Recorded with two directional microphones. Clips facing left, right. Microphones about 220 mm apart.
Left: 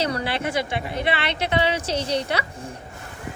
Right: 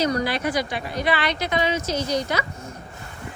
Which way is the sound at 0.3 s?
25° left (ahead or behind).